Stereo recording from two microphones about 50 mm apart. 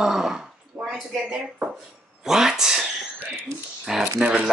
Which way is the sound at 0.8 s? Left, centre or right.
Right.